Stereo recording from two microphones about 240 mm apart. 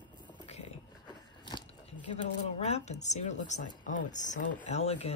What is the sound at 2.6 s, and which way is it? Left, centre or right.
A woman's voice, left.